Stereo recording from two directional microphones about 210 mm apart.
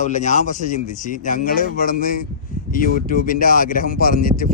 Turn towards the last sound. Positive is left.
turn(degrees=40)  # may be behind; listen again after turning